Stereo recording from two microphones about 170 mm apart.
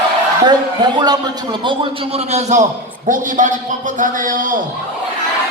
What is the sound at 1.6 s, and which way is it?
Speech, 30° right (ahead or behind).